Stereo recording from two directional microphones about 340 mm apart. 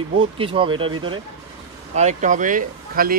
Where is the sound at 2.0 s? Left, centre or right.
Right.